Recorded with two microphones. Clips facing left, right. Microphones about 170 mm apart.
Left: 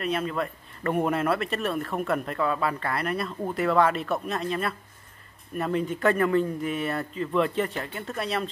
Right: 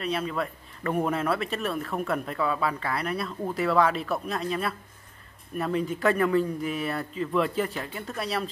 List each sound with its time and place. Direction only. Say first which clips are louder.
0.0 s speech: left 1 dB; centre (ahead or behind)